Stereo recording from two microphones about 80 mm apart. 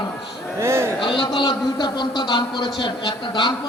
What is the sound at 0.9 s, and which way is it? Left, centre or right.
A man's voice, left.